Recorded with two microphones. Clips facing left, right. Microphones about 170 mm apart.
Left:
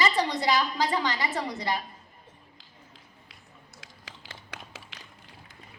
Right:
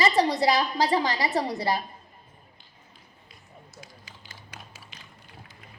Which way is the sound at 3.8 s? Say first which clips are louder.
Left 1 dB; 90° left.